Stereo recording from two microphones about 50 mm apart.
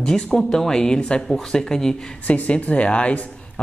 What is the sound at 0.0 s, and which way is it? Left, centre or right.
Speech, centre.